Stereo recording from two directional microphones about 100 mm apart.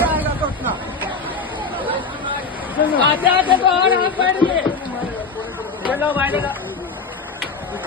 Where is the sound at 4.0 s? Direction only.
55° left (ahead or behind).